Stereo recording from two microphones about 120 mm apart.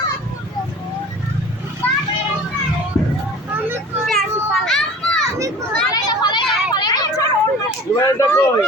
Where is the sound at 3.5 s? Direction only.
15° right (ahead or behind).